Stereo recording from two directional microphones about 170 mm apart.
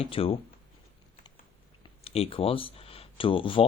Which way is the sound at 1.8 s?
35° left (ahead or behind).